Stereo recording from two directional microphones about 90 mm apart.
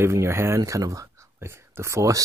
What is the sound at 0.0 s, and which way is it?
Speech, 30° right (ahead or behind).